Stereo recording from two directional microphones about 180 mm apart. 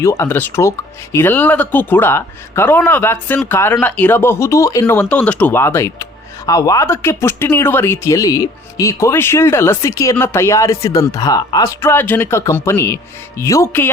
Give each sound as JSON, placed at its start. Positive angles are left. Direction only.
{"t": 0.0, "sound": "speech", "side_deg": 15}